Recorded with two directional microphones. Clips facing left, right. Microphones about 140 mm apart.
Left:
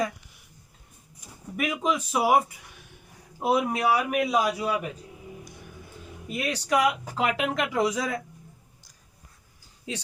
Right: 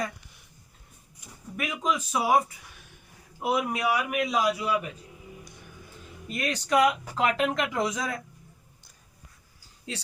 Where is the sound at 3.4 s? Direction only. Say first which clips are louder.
Left 3 dB; 35° left (ahead or behind).